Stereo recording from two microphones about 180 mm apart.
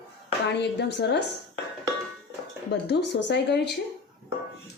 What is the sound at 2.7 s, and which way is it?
Speech, 75° left (ahead or behind).